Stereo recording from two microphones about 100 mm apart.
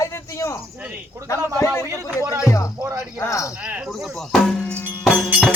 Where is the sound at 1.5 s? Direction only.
30° left (ahead or behind).